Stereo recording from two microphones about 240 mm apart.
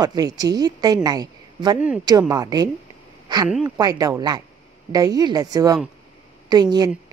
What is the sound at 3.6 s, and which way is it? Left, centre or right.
A woman's voice, centre.